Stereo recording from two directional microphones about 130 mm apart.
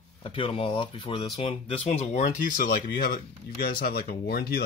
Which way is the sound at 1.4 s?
55° left (ahead or behind).